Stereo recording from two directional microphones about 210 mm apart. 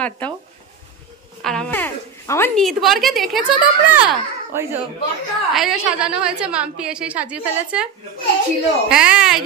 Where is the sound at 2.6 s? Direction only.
Centre (ahead or behind).